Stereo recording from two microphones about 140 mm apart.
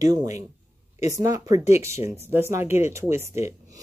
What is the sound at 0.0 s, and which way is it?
Speech, 25° right (ahead or behind).